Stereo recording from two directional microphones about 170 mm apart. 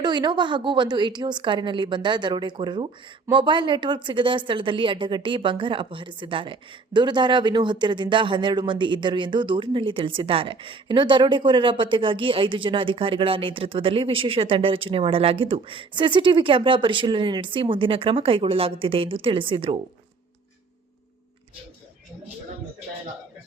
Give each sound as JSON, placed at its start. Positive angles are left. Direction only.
{"t": 0.0, "sound": "a woman's voice", "side_deg": -25}